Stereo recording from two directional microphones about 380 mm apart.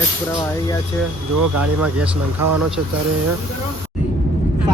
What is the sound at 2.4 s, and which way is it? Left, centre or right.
Speech, right.